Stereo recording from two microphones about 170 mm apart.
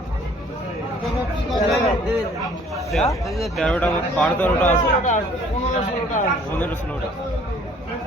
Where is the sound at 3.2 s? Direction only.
Centre (ahead or behind).